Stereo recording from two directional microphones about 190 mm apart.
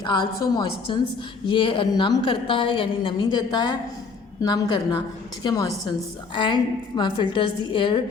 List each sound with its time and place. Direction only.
0.0 s a woman's voice: 20° left (ahead or behind)